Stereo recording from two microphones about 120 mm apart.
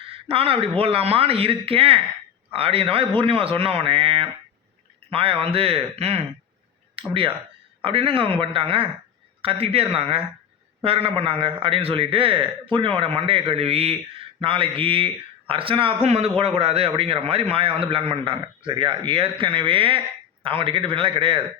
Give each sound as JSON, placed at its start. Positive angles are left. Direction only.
{"t": 0.0, "sound": "a sound", "side_deg": -50}
{"t": 0.8, "sound": "a man's voice", "side_deg": -55}
{"t": 16.0, "sound": "a man's voice", "side_deg": -60}